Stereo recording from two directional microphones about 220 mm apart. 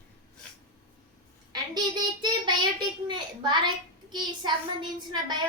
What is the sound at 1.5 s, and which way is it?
A child's voice, 20° right (ahead or behind).